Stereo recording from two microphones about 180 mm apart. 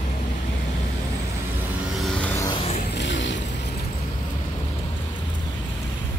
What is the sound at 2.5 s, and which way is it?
Music, 35° left (ahead or behind).